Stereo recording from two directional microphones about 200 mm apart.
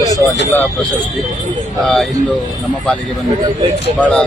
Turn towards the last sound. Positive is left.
turn(degrees=5)  # may be behind; listen again after turning